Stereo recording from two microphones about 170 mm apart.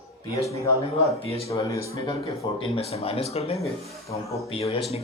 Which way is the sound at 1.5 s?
20° left (ahead or behind).